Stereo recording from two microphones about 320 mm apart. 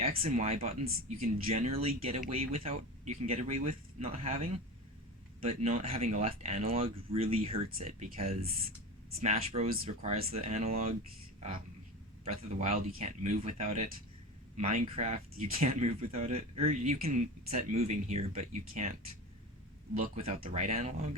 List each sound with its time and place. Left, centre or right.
0.0 s speech: right
1.1 s speech: right
1.6 s speech: centre
12.2 s speech: centre
20.0 s speech: centre